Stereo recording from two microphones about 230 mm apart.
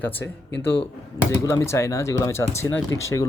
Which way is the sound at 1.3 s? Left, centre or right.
Centre.